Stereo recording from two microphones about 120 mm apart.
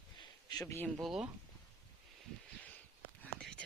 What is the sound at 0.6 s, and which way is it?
Speech, 25° left (ahead or behind).